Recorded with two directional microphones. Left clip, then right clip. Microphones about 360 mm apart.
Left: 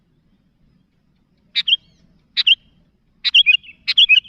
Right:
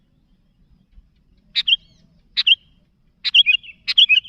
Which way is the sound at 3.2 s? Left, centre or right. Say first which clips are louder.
Left 2 dB; centre.